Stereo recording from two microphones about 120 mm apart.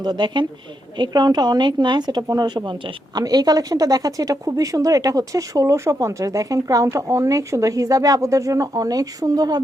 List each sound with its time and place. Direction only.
0.0 s a woman's voice: 35° right (ahead or behind)